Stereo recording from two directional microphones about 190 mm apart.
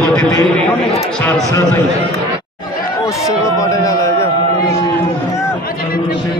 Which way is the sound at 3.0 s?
15° left (ahead or behind).